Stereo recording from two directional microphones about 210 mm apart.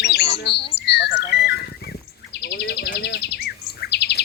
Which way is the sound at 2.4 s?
50° left (ahead or behind).